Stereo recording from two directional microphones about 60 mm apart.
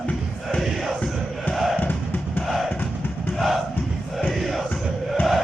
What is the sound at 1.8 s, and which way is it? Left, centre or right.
Music, left.